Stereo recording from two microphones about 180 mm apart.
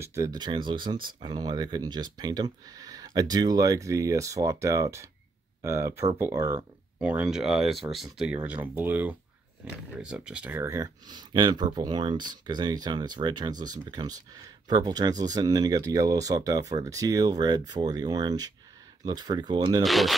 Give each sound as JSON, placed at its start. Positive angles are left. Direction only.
{"t": 0.0, "sound": "speech", "side_deg": -15}
{"t": 19.8, "sound": "speech", "side_deg": 0}